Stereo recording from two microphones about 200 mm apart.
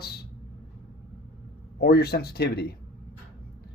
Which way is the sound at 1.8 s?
50° left (ahead or behind).